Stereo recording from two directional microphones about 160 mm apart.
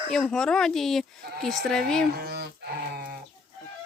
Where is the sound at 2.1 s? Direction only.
80° right.